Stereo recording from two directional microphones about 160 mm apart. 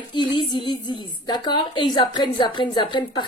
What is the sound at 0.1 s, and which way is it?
A woman's voice, 30° left (ahead or behind).